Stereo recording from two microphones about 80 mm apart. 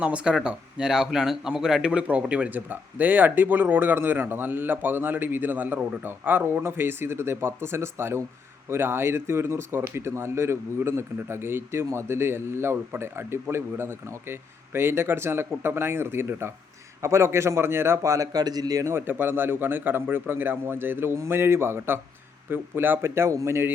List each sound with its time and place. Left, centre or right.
0.0 s speech: centre; by 18.9 s right
18.9 s speech: right